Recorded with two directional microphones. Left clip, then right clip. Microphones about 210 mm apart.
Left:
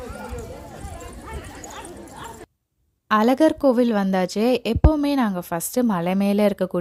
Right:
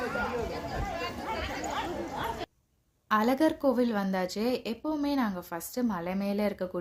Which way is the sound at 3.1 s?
45° left (ahead or behind).